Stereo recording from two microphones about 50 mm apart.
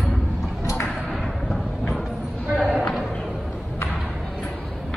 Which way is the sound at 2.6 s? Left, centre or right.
Centre.